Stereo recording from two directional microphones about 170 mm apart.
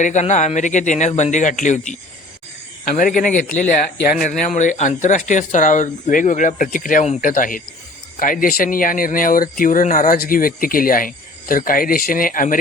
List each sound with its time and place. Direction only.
0.0 s speech: 45° left (ahead or behind)